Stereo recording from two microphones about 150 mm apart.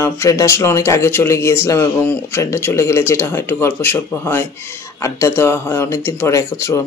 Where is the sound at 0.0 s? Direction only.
20° left (ahead or behind).